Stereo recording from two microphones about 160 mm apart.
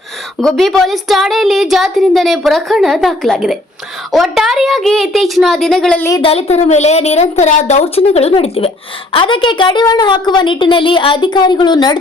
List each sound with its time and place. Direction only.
0.3 s a woman's voice: centre (ahead or behind)
6.2 s a woman's voice: 40° left (ahead or behind)